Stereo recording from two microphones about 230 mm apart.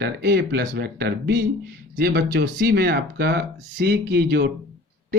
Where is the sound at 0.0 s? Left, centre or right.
Right.